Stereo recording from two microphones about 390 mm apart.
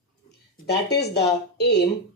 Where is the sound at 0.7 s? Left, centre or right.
Left.